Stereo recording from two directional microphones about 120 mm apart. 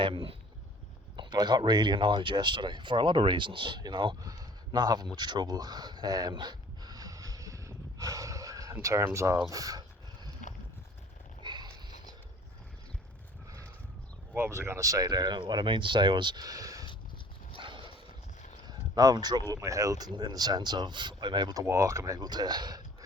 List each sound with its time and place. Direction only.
0.0 s speech: 45° right (ahead or behind)
5.1 s a sound: 35° right (ahead or behind)
8.7 s speech: 25° right (ahead or behind)
11.4 s a sound: 40° right (ahead or behind)
14.3 s speech: 20° right (ahead or behind)
17.6 s dog: 45° right (ahead or behind)
18.7 s speech: 35° right (ahead or behind)